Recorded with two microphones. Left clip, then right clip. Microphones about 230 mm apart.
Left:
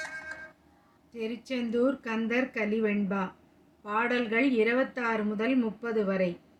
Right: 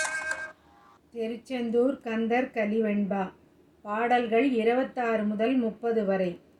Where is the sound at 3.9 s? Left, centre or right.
Left.